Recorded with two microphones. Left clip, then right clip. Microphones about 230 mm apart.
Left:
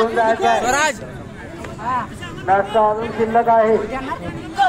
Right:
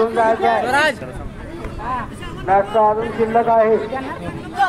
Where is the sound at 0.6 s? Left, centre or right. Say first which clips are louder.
Right 1 dB; left.